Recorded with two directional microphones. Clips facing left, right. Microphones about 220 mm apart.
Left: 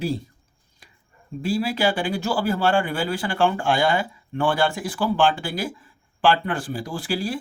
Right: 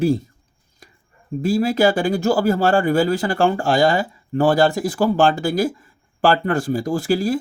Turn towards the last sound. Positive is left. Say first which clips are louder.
# right 8 dB
turn(degrees=-45)  # may be behind; listen again after turning